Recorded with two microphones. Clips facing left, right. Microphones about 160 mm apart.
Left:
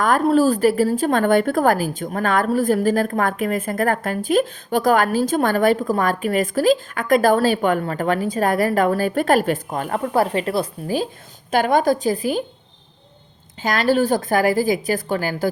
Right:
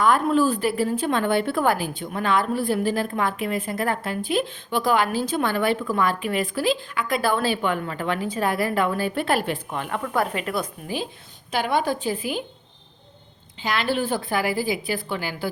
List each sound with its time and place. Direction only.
0.0 s a woman's voice: 40° left (ahead or behind)
13.6 s a woman's voice: 45° left (ahead or behind)